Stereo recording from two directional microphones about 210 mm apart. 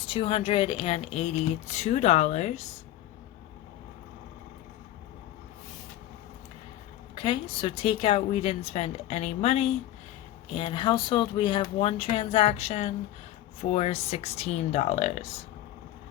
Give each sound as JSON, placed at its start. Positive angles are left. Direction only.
{"t": 0.1, "sound": "speech", "side_deg": 25}
{"t": 7.2, "sound": "speech", "side_deg": 25}